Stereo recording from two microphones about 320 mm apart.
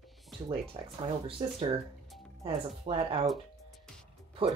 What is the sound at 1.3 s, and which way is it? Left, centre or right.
Speech, centre.